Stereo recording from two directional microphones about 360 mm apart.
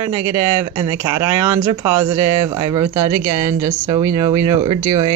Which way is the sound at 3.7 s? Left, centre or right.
Centre.